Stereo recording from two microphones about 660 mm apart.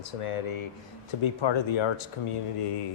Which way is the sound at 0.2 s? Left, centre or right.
Left.